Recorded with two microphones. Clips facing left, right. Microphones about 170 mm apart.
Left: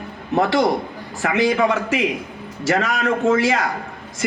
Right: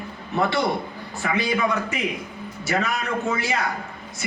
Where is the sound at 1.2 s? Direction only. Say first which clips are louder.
Left 6 dB; 90° left.